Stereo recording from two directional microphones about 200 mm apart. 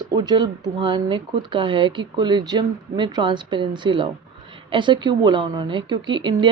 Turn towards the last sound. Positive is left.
turn(degrees=-25)  # may be behind; listen again after turning